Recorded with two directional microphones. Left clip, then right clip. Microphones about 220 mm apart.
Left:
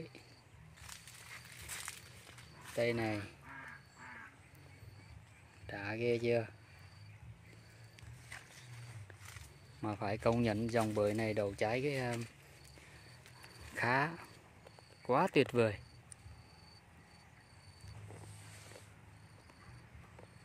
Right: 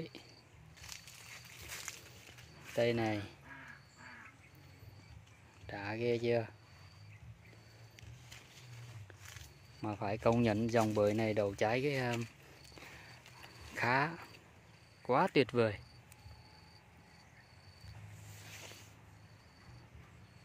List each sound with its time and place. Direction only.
1.9 s walk: 5° left (ahead or behind)
2.7 s speech: 10° right (ahead or behind)
5.7 s speech: centre (ahead or behind)
9.8 s speech: centre (ahead or behind)
13.7 s speech: centre (ahead or behind)